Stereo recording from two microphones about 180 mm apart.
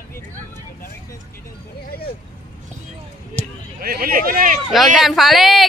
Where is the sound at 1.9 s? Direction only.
60° left (ahead or behind).